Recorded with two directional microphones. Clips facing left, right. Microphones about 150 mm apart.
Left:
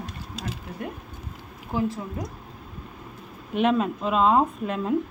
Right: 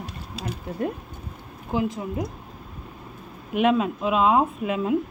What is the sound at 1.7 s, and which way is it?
Speech, 15° right (ahead or behind).